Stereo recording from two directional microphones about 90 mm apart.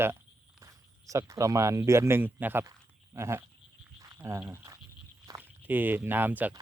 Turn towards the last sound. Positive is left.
turn(degrees=-20)  # may be behind; listen again after turning